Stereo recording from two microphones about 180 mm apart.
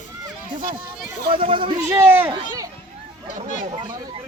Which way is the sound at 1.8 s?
10° right (ahead or behind).